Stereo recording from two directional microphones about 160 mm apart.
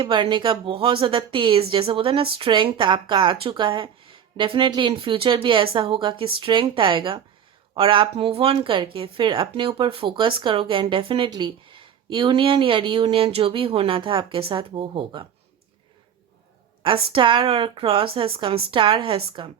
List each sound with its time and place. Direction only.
0.0 s speech: 30° right (ahead or behind)
16.8 s speech: 30° right (ahead or behind)